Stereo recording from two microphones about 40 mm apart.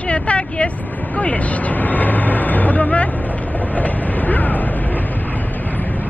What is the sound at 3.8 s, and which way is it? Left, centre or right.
Train, left.